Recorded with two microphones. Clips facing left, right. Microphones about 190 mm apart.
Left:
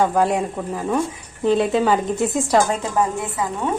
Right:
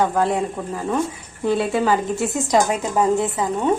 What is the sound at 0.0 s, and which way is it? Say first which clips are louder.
A woman's voice: left 1 dB; 10° left (ahead or behind).